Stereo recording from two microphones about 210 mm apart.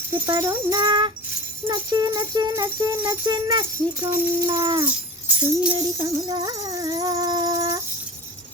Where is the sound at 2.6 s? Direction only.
10° right (ahead or behind).